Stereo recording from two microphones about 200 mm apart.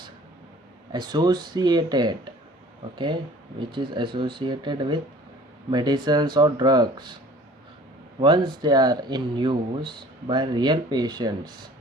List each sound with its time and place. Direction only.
0.9 s speech: 20° right (ahead or behind)
8.2 s speech: 20° right (ahead or behind)